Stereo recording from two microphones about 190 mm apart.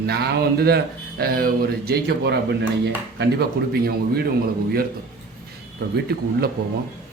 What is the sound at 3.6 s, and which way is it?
Speech, 60° right (ahead or behind).